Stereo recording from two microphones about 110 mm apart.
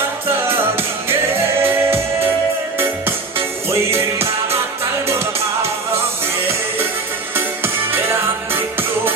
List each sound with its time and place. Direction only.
0.4 s music: 20° right (ahead or behind)
3.3 s music: 25° right (ahead or behind)
7.3 s music: 20° right (ahead or behind)